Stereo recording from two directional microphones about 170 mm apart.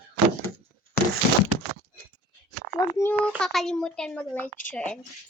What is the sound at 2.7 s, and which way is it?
Speech, 10° left (ahead or behind).